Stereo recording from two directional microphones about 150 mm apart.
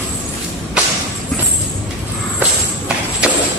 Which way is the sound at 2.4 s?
10° right (ahead or behind).